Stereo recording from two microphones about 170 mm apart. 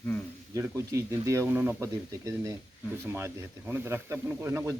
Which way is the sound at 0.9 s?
15° right (ahead or behind).